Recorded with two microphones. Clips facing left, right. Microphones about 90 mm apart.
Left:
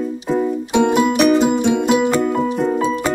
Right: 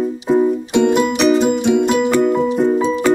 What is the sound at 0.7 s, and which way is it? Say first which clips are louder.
Music: left 2 dB; 10° left (ahead or behind).